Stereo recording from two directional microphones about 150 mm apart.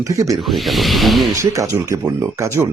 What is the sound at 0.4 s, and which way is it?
Speech, centre (ahead or behind).